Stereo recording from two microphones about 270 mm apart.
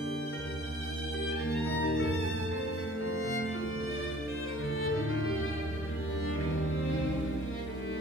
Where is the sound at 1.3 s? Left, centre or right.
Left.